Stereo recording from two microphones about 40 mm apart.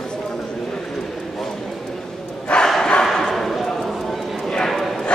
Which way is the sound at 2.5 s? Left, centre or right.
Left.